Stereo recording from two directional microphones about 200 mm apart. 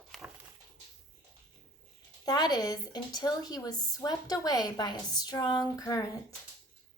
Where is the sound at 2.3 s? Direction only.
20° left (ahead or behind).